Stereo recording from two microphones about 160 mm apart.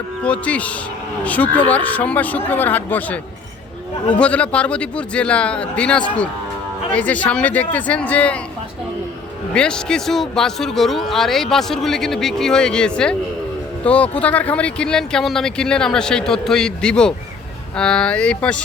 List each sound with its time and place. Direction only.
0.2 s speech: 5° left (ahead or behind)
9.6 s a man's voice: 5° left (ahead or behind)